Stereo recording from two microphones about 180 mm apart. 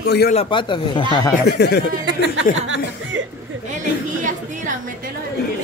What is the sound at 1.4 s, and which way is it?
Speech, 70° left (ahead or behind).